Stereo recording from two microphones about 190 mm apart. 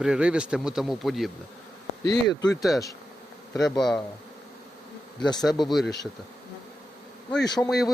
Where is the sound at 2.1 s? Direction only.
20° left (ahead or behind).